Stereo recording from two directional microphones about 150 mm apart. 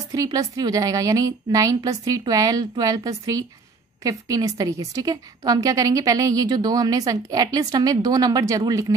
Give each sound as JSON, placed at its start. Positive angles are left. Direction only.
{"t": 0.1, "sound": "a woman's voice", "side_deg": -25}